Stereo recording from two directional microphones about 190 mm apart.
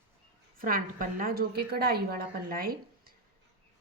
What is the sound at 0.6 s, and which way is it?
A woman's voice, 50° right (ahead or behind).